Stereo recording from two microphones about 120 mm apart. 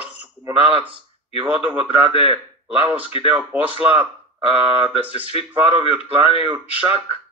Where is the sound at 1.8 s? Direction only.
50° left (ahead or behind).